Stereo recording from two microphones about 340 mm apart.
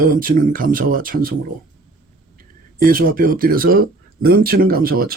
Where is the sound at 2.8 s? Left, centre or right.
Right.